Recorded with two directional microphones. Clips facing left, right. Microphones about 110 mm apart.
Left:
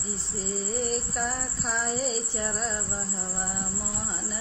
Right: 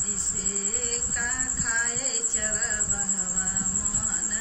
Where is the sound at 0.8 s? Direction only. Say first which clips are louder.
Left 6 dB; 25° left (ahead or behind).